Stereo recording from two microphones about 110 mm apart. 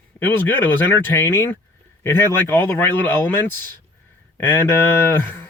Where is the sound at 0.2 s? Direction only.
15° left (ahead or behind).